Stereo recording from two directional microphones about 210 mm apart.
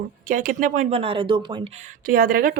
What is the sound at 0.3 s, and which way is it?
Speech, 40° right (ahead or behind).